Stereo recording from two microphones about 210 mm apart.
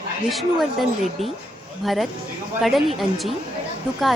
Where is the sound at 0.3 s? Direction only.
Centre (ahead or behind).